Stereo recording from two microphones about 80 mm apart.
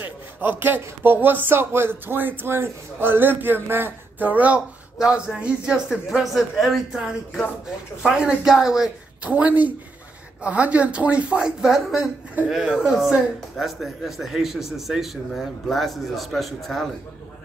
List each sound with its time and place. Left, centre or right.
0.0 s a man's voice: right; by 8.9 s centre
9.2 s a man's voice: centre